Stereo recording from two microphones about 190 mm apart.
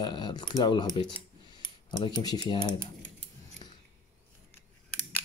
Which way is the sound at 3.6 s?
25° left (ahead or behind).